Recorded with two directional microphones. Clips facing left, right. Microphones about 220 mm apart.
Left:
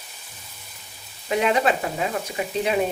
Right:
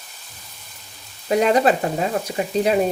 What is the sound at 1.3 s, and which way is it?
Speech, 40° right (ahead or behind).